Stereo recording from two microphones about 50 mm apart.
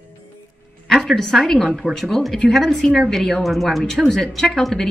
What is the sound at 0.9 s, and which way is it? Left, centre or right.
A woman's voice, centre.